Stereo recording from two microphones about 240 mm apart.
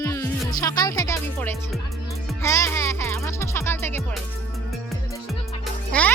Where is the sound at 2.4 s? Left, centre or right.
Centre.